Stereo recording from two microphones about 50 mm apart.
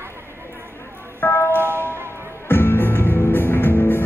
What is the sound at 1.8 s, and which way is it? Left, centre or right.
Music, right.